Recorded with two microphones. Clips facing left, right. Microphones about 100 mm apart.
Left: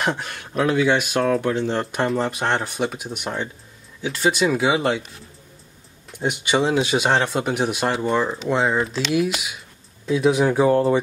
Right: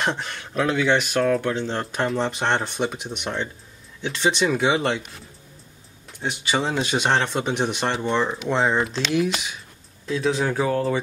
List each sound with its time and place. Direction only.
0.0 s speech: 5° left (ahead or behind)
6.1 s speech: 15° left (ahead or behind)